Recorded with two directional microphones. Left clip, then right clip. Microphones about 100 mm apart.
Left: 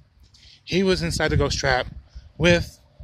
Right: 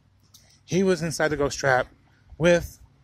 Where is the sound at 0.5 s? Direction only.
20° left (ahead or behind).